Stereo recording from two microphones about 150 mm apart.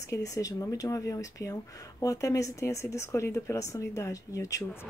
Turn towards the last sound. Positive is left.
turn(degrees=20)  # may be behind; listen again after turning